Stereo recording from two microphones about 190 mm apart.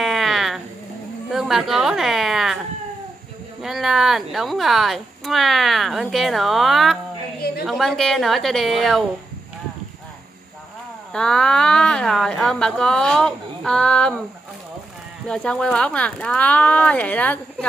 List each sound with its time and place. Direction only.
0.0 s a sound: centre (ahead or behind)
3.6 s speech: centre (ahead or behind)
11.1 s speech: 5° left (ahead or behind)
15.2 s speech: 5° left (ahead or behind)